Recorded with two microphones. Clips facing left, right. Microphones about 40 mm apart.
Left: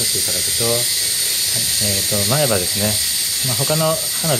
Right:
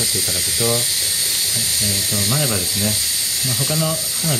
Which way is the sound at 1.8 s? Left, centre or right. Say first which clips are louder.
Left 3 dB; left.